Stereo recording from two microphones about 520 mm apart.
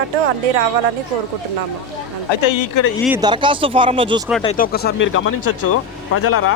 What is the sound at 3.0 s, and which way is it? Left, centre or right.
Speech, centre.